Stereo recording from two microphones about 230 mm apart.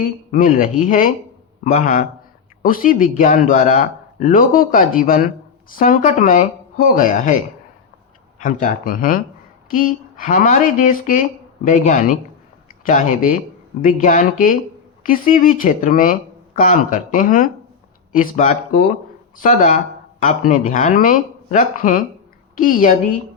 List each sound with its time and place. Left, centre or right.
0.0 s speech: left
8.4 s speech: left